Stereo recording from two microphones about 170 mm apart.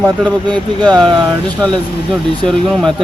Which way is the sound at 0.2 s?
5° left (ahead or behind).